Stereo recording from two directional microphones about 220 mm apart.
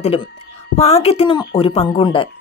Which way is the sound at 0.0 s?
25° left (ahead or behind).